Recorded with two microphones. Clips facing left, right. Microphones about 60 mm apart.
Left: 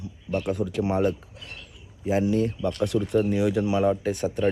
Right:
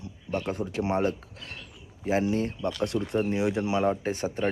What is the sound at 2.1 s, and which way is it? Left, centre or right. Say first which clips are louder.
Speech: left 3 dB; right.